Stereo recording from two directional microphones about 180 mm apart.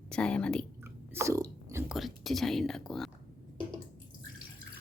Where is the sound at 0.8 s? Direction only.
15° right (ahead or behind).